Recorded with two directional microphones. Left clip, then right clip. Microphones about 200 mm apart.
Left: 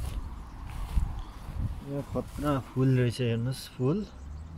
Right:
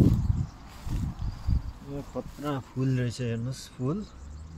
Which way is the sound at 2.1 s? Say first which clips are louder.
Left 3 dB; 20° left (ahead or behind).